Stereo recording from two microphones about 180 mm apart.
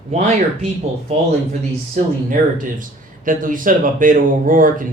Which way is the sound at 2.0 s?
45° right (ahead or behind).